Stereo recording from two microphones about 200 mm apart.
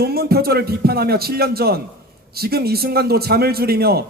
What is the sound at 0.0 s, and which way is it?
A man's voice, 50° right (ahead or behind).